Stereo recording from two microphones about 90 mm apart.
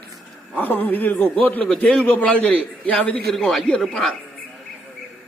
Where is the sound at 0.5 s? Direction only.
20° left (ahead or behind).